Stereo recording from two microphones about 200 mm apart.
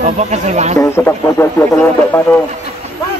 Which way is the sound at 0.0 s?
35° right (ahead or behind).